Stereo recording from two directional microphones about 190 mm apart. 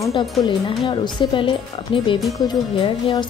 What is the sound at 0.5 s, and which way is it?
A woman's voice, 25° left (ahead or behind).